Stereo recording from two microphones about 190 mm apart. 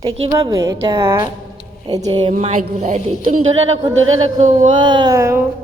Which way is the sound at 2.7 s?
40° right (ahead or behind).